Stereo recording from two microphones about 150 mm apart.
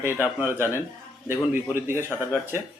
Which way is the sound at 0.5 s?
15° right (ahead or behind).